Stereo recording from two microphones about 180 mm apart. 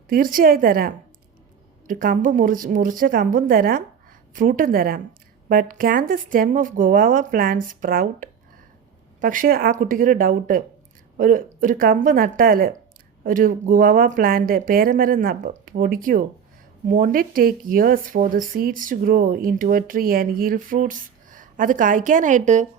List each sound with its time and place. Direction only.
0.1 s speech: 50° right (ahead or behind)